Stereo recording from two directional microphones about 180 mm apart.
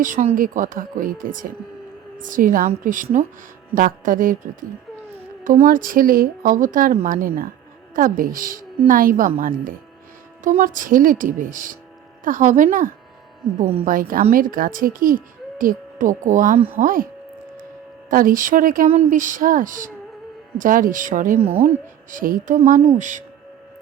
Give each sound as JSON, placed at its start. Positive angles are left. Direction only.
{"t": 0.0, "sound": "speech", "side_deg": -40}
{"t": 18.1, "sound": "speech", "side_deg": -50}
{"t": 21.6, "sound": "a woman's voice", "side_deg": -35}
{"t": 22.2, "sound": "speech", "side_deg": -50}
{"t": 22.8, "sound": "speech", "side_deg": -35}